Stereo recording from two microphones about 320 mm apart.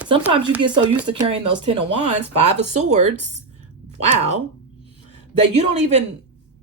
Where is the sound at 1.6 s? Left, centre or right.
Centre.